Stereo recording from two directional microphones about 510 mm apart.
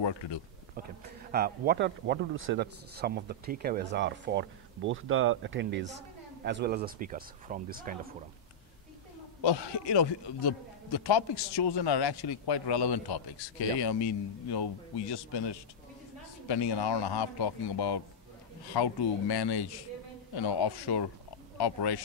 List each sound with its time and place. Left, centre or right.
0.0 s speech: left
0.8 s speech: centre
9.4 s a man's voice: left